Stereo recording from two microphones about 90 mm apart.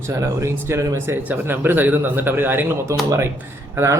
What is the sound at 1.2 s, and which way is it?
A man's voice, 20° right (ahead or behind).